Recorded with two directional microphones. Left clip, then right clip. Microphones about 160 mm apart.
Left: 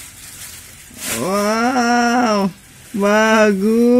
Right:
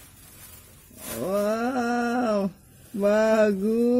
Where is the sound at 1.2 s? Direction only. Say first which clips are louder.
Left 8 dB; 30° left (ahead or behind).